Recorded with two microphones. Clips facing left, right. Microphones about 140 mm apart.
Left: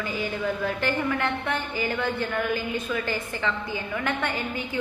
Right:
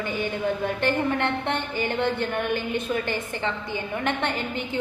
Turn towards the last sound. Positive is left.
turn(degrees=-25)  # may be behind; listen again after turning